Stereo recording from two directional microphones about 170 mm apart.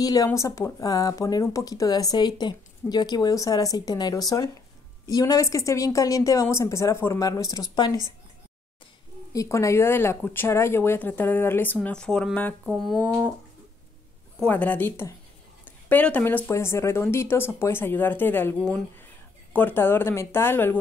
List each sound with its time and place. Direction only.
0.0 s speech: 20° left (ahead or behind)
9.3 s speech: 20° left (ahead or behind)
14.4 s speech: 10° left (ahead or behind)
15.6 s a sound: 10° left (ahead or behind)
16.4 s speech: 15° left (ahead or behind)
19.5 s speech: 10° left (ahead or behind)